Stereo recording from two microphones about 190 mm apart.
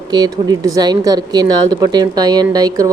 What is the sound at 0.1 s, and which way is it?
Speech, 20° right (ahead or behind).